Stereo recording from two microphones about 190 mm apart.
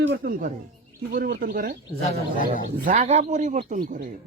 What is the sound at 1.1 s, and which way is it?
A man's voice, 45° right (ahead or behind).